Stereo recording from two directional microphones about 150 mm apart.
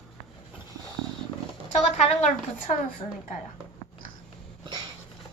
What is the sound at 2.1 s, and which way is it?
Speech, 50° left (ahead or behind).